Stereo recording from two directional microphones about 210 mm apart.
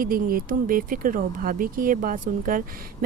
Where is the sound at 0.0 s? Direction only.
45° right (ahead or behind).